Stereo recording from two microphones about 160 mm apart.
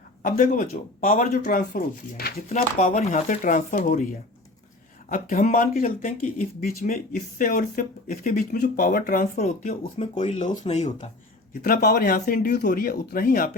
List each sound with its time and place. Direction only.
0.2 s speech: 60° left (ahead or behind)
2.5 s speech: 45° left (ahead or behind); by 9.4 s 65° left (ahead or behind)
9.4 s speech: 45° left (ahead or behind)
11.6 s speech: 70° left (ahead or behind)